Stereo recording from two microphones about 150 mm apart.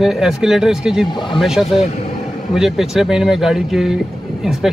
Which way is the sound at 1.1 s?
30° left (ahead or behind).